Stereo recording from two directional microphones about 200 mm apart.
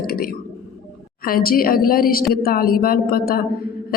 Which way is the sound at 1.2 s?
45° left (ahead or behind).